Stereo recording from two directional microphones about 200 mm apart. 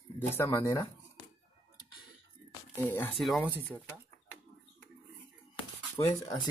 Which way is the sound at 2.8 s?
10° left (ahead or behind).